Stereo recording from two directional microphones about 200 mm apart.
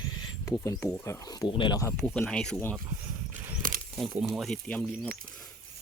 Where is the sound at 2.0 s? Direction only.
5° left (ahead or behind).